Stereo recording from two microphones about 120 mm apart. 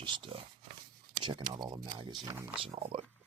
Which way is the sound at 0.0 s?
40° right (ahead or behind).